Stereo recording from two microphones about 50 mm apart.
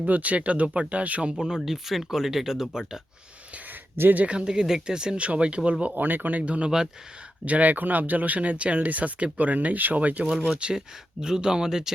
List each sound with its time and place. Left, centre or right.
0.0 s speech: right; by 3.0 s centre
4.1 s speech: right
4.4 s speech: centre
6.0 s speech: right
10.6 s speech: centre